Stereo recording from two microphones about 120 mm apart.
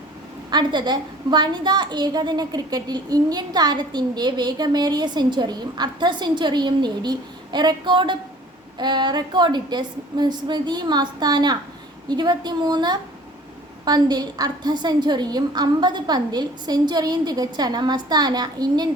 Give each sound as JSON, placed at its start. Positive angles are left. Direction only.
{"t": 0.5, "sound": "a woman's voice", "side_deg": -40}